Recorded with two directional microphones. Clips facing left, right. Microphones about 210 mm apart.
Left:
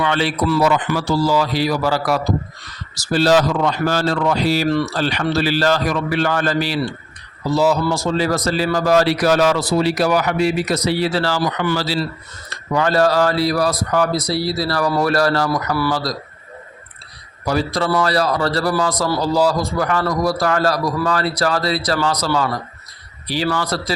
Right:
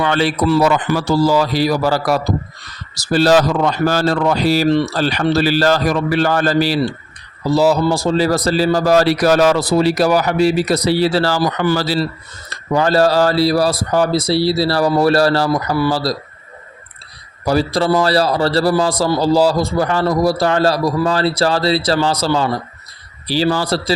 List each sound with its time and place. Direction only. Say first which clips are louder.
0.0 s speech: right 3 dB; 40° right (ahead or behind)
12.5 s a man's voice: right 3 dB; 30° right (ahead or behind)
17.4 s a man's voice: right 4 dB; 35° right (ahead or behind)